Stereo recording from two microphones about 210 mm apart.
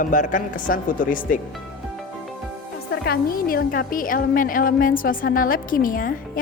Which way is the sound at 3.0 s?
45° left (ahead or behind).